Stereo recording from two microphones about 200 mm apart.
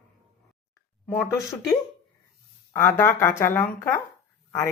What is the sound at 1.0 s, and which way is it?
Speech, 10° left (ahead or behind).